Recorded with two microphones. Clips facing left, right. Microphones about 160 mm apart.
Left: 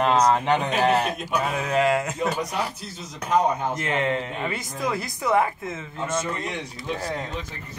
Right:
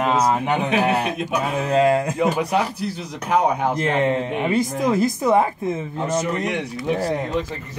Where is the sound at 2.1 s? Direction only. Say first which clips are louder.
Right 6 dB; 70° right (ahead or behind).